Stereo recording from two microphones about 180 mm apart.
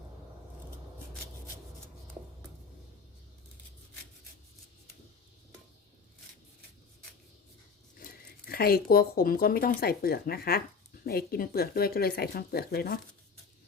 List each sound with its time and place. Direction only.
7.9 s speech: 55° left (ahead or behind)